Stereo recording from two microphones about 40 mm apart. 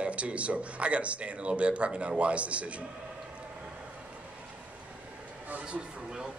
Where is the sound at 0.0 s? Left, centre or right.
Right.